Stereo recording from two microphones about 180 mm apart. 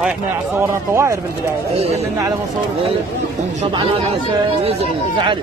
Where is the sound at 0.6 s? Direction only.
15° right (ahead or behind).